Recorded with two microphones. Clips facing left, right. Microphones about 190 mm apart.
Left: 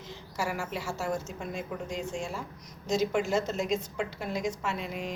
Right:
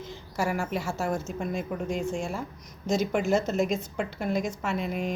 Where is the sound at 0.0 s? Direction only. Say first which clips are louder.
Right 4 dB; 50° right (ahead or behind).